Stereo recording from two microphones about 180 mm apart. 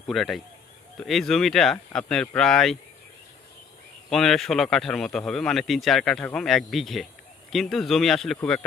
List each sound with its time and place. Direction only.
0.1 s speech: centre (ahead or behind)
4.1 s speech: centre (ahead or behind)